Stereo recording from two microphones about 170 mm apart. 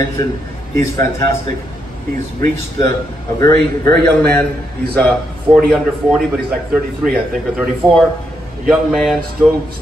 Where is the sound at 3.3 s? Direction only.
20° left (ahead or behind).